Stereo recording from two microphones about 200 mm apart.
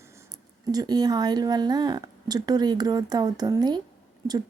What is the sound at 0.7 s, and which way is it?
Speech, 20° right (ahead or behind).